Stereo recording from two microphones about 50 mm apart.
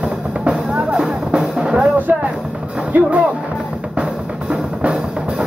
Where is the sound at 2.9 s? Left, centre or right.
Right.